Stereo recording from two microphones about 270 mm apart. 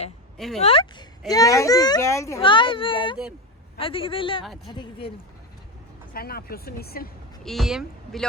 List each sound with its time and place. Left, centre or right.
0.3 s speech: centre
0.6 s a child's voice: centre
6.1 s speech: left
7.4 s speech: centre